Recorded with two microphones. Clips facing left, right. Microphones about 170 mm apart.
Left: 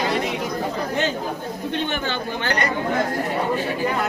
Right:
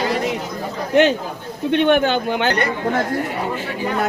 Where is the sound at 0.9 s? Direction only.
70° right (ahead or behind).